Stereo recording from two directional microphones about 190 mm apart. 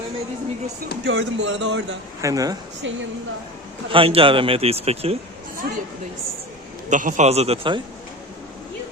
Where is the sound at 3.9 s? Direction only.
30° right (ahead or behind).